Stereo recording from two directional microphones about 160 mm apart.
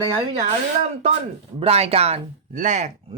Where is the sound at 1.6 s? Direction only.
40° right (ahead or behind).